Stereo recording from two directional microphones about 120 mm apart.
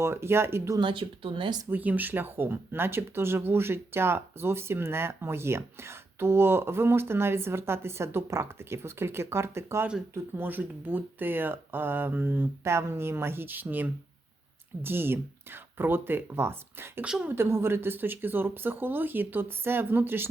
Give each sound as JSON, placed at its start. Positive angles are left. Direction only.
{"t": 0.0, "sound": "speech", "side_deg": -20}
{"t": 0.8, "sound": "speech", "side_deg": -45}
{"t": 1.7, "sound": "speech", "side_deg": -15}
{"t": 17.1, "sound": "speech", "side_deg": -10}
{"t": 17.3, "sound": "speech", "side_deg": -20}